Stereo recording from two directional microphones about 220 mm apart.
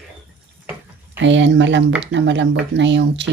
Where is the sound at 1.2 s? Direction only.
55° right (ahead or behind).